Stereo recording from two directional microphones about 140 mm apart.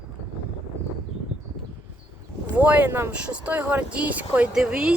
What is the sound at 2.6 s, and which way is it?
Speech, 10° right (ahead or behind).